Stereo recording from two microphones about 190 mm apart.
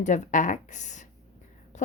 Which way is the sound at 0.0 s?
40° left (ahead or behind).